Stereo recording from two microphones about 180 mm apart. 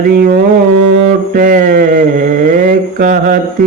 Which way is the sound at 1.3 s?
50° right (ahead or behind).